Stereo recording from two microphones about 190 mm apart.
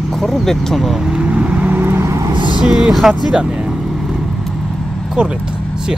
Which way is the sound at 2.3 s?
25° right (ahead or behind).